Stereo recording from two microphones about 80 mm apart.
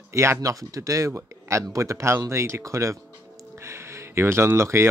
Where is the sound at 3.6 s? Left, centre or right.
Right.